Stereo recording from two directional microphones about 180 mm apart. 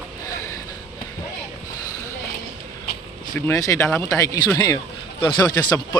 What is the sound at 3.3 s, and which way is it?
A man's voice, 20° left (ahead or behind).